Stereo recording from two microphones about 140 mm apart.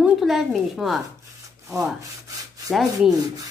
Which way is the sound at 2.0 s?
25° right (ahead or behind).